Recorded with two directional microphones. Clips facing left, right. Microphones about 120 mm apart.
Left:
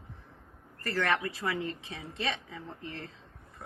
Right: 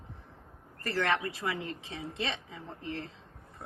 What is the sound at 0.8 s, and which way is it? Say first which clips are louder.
A woman's voice: even; 20° right (ahead or behind).